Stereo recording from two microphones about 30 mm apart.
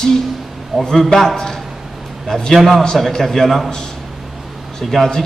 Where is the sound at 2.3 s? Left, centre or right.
Left.